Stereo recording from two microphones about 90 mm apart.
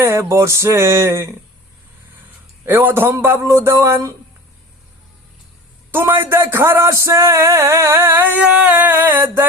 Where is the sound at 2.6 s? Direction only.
25° right (ahead or behind).